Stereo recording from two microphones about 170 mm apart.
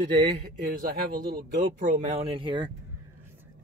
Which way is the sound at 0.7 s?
60° right (ahead or behind).